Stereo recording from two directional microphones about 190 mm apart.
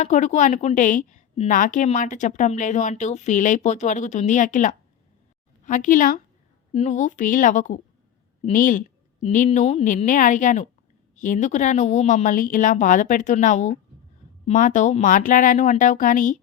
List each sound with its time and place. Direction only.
0.0 s a woman's voice: 40° left (ahead or behind)